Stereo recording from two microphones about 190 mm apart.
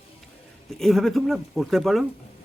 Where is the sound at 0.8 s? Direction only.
Centre (ahead or behind).